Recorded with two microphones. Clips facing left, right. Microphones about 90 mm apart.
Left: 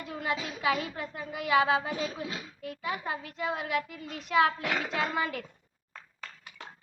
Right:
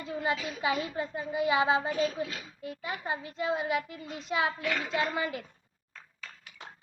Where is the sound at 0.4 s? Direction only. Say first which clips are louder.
Left 1 dB; 25° right (ahead or behind).